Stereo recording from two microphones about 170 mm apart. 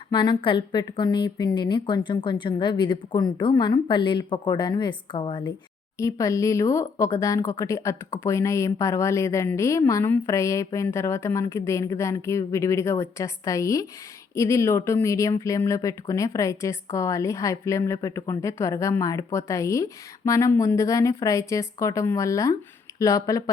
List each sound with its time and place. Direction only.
0.1 s a woman's voice: 25° left (ahead or behind)
6.0 s a woman's voice: 20° left (ahead or behind)